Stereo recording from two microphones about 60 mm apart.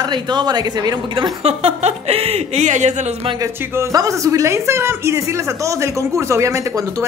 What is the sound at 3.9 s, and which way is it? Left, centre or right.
Speech, right.